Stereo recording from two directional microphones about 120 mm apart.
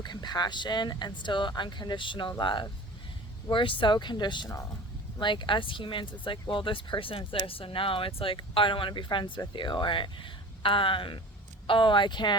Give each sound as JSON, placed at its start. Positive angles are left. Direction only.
{"t": 0.0, "sound": "speech", "side_deg": 35}